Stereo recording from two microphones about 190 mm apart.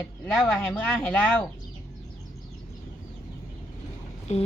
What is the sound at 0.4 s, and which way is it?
Speech, 10° left (ahead or behind).